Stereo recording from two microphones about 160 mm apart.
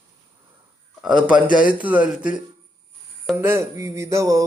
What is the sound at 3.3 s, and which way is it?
A man's voice, 15° right (ahead or behind).